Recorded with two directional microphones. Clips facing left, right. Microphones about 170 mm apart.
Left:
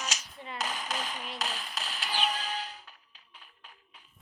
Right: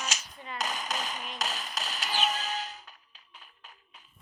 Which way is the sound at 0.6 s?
45° right (ahead or behind).